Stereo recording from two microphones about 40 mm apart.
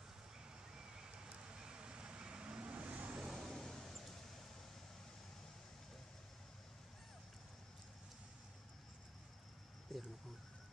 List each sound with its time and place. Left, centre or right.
0.7 s vehicle: centre
3.2 s vehicle: centre
3.5 s vehicle: centre
9.9 s speech: centre